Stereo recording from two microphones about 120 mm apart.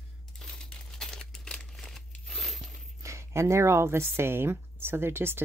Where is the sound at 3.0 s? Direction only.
25° right (ahead or behind).